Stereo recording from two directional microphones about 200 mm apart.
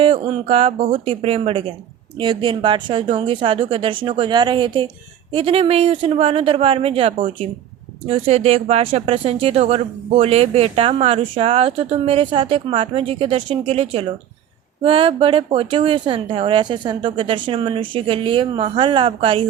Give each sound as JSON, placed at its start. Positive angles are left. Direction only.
{"t": 0.0, "sound": "speech", "side_deg": -30}